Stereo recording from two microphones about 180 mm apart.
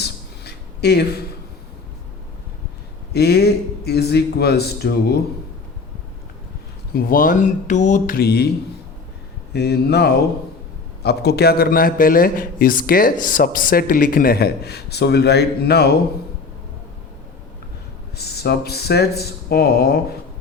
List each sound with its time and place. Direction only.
0.0 s a sound: 65° left (ahead or behind)
3.1 s a man's voice: 65° left (ahead or behind)
6.9 s speech: 50° left (ahead or behind)
9.5 s a man's voice: 65° left (ahead or behind)
18.2 s a man's voice: 65° left (ahead or behind)